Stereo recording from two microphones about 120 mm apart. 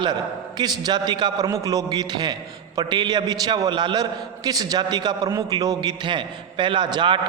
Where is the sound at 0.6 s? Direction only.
35° right (ahead or behind).